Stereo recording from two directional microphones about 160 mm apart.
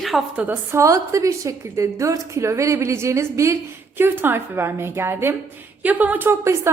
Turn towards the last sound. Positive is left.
turn(degrees=-15)  # may be behind; listen again after turning